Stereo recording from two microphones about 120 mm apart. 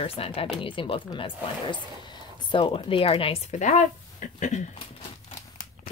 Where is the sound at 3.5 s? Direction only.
85° left; by 5.3 s 65° left (ahead or behind).